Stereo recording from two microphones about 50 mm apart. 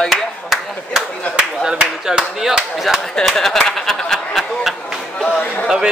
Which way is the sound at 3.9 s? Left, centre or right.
Centre.